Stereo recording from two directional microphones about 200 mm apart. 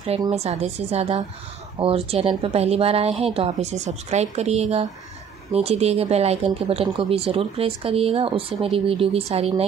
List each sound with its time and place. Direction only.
0.3 s speech: 30° right (ahead or behind)